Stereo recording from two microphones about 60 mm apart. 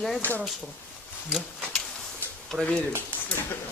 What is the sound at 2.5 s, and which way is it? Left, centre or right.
Speech, right.